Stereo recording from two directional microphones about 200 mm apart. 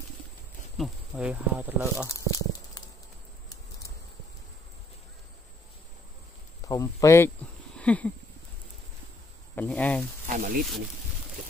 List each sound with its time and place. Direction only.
0.7 s speech: centre (ahead or behind)
2.0 s a sound: 15° left (ahead or behind)
6.6 s speech: 15° left (ahead or behind)
7.7 s a sound: 5° left (ahead or behind)
9.6 s speech: 5° left (ahead or behind)
10.2 s speech: 40° right (ahead or behind)